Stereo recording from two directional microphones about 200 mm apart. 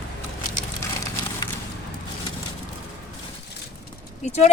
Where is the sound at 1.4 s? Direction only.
20° left (ahead or behind).